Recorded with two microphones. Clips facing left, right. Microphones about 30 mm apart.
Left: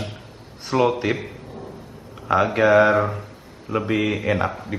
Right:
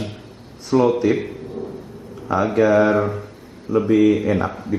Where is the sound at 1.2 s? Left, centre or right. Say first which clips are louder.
Right 7 dB; centre.